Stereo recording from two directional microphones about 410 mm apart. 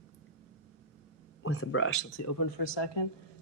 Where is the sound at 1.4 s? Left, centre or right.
Left.